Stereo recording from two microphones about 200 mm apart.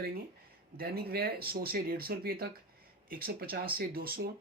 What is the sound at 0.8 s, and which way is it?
Speech, 50° right (ahead or behind).